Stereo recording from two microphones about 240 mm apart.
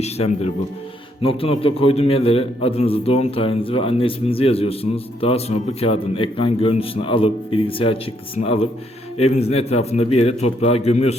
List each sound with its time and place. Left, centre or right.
0.0 s a man's voice: left